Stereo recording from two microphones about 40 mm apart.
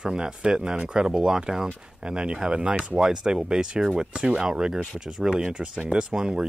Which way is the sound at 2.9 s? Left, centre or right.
Centre.